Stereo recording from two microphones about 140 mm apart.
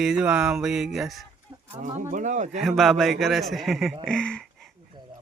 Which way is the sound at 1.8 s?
60° right (ahead or behind).